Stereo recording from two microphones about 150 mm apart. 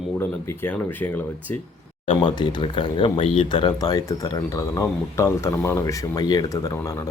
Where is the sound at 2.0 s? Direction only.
30° left (ahead or behind).